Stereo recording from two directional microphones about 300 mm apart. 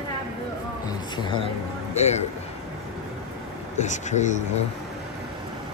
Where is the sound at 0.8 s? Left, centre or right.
Centre.